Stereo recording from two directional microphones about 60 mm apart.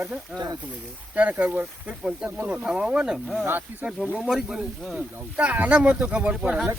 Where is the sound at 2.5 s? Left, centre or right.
Centre.